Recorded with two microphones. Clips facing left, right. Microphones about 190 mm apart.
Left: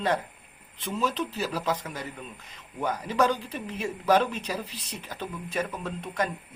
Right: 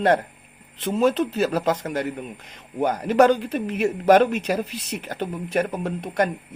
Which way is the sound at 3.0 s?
75° right (ahead or behind).